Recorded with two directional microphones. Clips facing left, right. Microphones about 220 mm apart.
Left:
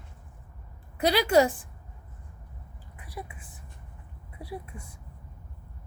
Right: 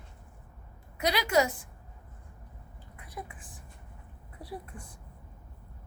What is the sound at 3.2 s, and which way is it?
Speech, 15° left (ahead or behind).